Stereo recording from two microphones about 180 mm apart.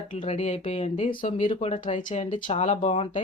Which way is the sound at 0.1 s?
40° left (ahead or behind).